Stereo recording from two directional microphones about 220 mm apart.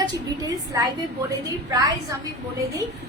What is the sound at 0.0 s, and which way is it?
Speech, 20° right (ahead or behind).